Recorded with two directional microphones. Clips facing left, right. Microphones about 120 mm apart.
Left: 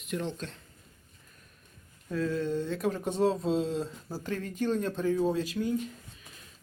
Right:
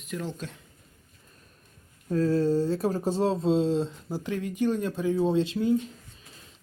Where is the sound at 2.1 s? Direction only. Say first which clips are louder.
Right 7 dB; 35° right (ahead or behind).